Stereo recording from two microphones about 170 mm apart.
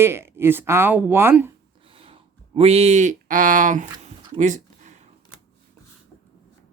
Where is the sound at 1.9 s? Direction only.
35° right (ahead or behind); by 3.9 s 50° right (ahead or behind).